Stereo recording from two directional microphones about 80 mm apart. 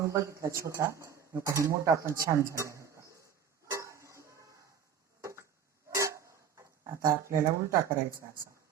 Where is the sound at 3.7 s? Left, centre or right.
Right.